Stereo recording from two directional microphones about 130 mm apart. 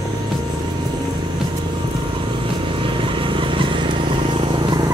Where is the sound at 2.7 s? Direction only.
40° right (ahead or behind).